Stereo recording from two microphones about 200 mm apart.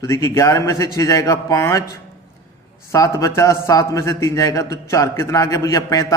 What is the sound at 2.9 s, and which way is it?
A man's voice, 15° left (ahead or behind).